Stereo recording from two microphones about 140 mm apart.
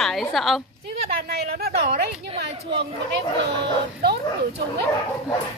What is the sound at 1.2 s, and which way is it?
Speech, 90° right.